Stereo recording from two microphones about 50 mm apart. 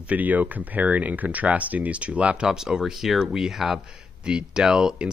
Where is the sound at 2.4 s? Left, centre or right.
Centre.